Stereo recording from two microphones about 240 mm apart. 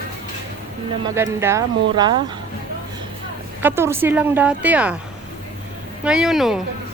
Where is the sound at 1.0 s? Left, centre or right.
Centre.